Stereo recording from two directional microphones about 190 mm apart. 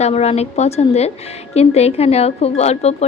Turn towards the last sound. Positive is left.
turn(degrees=35)  # may be behind; listen again after turning